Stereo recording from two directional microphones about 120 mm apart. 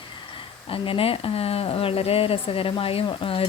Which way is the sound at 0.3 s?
50° left (ahead or behind).